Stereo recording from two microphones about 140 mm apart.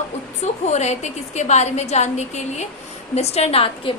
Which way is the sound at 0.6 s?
55° left (ahead or behind).